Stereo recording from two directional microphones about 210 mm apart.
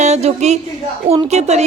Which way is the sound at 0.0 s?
30° right (ahead or behind).